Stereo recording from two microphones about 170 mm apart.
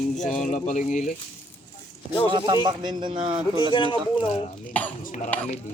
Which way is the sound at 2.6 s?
25° right (ahead or behind).